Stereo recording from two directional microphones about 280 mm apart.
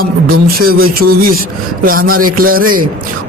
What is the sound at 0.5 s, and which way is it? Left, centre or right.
A man's voice, right.